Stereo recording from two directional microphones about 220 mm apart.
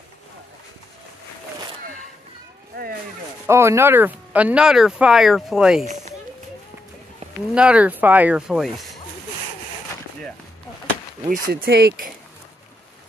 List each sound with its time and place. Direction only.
2.7 s a sound: 45° right (ahead or behind)
3.4 s speech: 10° right (ahead or behind)
7.5 s speech: 5° right (ahead or behind)
11.2 s speech: 40° right (ahead or behind)